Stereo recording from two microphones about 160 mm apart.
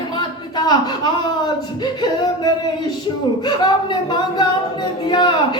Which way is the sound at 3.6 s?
25° left (ahead or behind).